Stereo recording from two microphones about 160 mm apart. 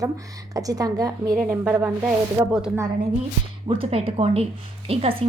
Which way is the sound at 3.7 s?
35° right (ahead or behind).